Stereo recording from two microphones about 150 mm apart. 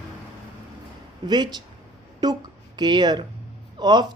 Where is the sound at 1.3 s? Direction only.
30° right (ahead or behind).